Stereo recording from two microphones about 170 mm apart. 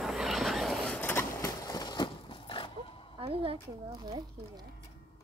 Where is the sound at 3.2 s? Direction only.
25° right (ahead or behind).